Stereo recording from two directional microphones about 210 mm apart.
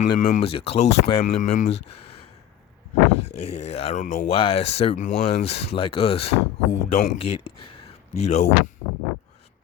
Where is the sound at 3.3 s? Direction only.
30° left (ahead or behind).